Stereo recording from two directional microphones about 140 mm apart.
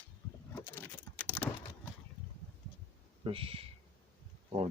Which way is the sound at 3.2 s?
40° right (ahead or behind).